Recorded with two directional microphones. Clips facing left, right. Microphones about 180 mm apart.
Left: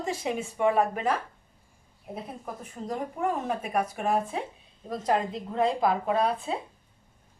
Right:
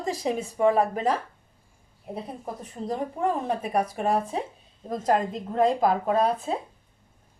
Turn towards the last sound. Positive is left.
turn(degrees=-40)  # may be behind; listen again after turning